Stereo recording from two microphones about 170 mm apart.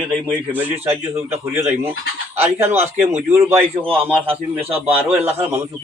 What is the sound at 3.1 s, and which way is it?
Speech, 40° right (ahead or behind).